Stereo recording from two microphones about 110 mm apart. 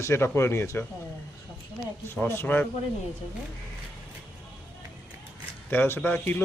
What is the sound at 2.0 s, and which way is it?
Speech, 20° left (ahead or behind).